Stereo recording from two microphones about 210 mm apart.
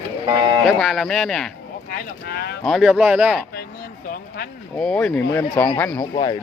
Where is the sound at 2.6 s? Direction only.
Centre (ahead or behind).